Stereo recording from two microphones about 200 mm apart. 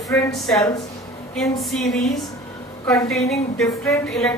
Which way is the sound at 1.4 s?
Centre (ahead or behind).